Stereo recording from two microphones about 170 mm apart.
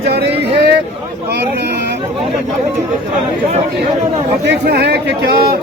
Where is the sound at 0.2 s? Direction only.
70° right (ahead or behind).